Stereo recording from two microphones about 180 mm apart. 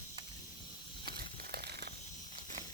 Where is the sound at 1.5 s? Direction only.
60° right (ahead or behind).